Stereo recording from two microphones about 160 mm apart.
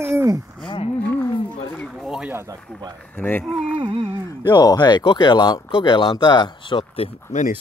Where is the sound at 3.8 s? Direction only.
30° right (ahead or behind).